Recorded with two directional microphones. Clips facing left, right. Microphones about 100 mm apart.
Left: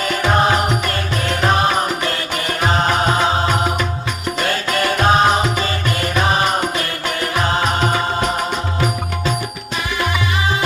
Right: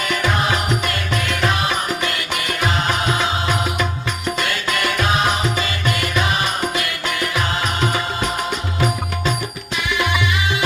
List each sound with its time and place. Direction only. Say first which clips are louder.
0.0 s music: left 4 dB; 35° left (ahead or behind)
4.4 s music: left 6 dB; 35° left (ahead or behind)